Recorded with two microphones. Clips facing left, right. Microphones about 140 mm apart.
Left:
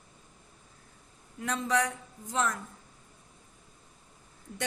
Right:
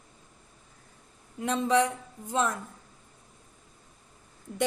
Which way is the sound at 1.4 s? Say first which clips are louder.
Right 5 dB; 25° right (ahead or behind).